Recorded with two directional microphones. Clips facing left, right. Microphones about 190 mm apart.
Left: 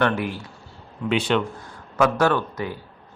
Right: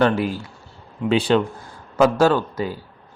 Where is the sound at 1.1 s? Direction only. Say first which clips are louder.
Right 4 dB; 35° right (ahead or behind).